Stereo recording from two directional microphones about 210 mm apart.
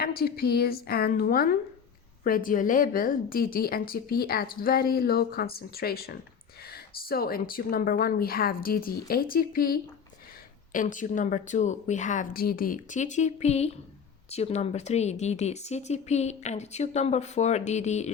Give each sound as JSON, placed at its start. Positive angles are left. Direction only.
{"t": 0.0, "sound": "a woman's voice", "side_deg": 45}